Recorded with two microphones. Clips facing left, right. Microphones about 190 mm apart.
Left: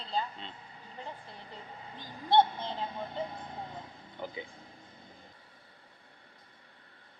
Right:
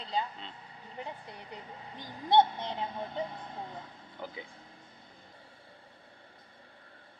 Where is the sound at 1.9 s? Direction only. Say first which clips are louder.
Right 1 dB; 20° right (ahead or behind).